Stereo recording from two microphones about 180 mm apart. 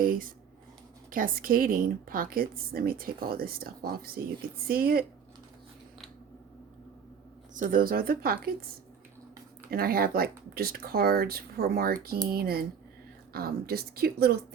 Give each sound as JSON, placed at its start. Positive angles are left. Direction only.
{"t": 0.0, "sound": "a woman's voice", "side_deg": -50}
{"t": 7.5, "sound": "a woman's voice", "side_deg": -50}
{"t": 9.6, "sound": "speech", "side_deg": -55}